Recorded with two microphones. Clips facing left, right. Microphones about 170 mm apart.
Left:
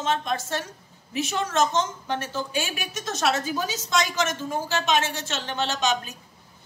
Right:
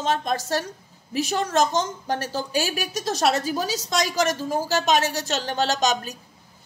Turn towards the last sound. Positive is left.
turn(degrees=-40)  # may be behind; listen again after turning